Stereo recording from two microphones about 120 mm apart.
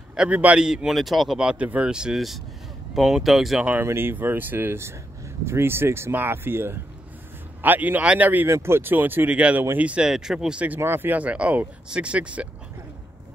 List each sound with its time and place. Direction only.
0.1 s speech: 10° right (ahead or behind)
3.6 s speech: 15° right (ahead or behind)